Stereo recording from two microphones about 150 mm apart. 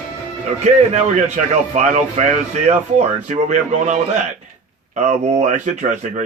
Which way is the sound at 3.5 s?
50° right (ahead or behind).